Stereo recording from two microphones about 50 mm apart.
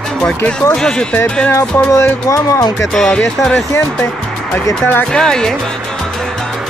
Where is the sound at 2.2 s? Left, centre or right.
Left.